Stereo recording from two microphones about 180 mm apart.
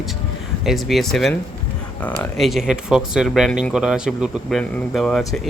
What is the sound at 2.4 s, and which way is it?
Speech, centre (ahead or behind).